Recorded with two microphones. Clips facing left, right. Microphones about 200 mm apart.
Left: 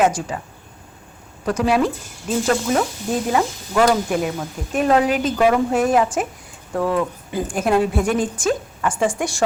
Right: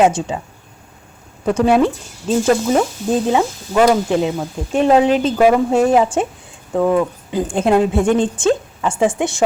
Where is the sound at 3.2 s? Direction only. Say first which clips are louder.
Right 4 dB; 20° right (ahead or behind).